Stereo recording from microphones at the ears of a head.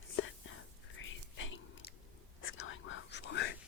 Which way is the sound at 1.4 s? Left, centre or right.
Left.